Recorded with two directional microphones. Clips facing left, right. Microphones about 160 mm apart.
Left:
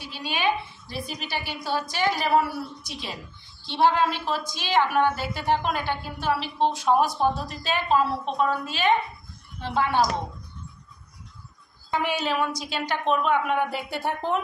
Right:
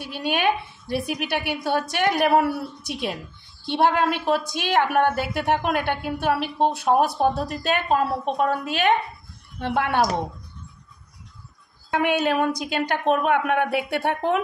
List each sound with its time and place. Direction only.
0.0 s a woman's voice: 55° right (ahead or behind)
11.9 s a woman's voice: 55° right (ahead or behind)